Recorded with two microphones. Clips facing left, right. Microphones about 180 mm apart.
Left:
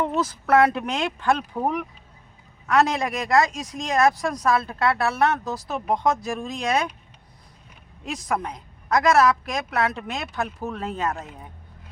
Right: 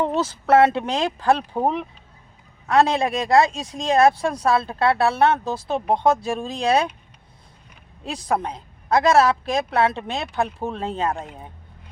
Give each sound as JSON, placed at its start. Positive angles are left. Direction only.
{"t": 0.0, "sound": "speech", "side_deg": -30}
{"t": 8.0, "sound": "speech", "side_deg": -30}